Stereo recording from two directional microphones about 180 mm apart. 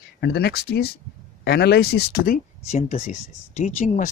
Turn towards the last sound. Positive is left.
turn(degrees=45)  # may be behind; listen again after turning